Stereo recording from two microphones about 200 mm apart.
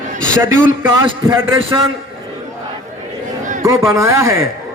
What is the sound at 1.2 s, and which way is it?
Speech, 10° right (ahead or behind).